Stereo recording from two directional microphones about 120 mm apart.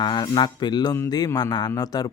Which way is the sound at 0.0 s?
40° left (ahead or behind).